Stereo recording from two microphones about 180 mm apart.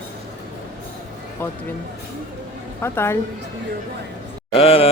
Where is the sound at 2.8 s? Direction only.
15° left (ahead or behind).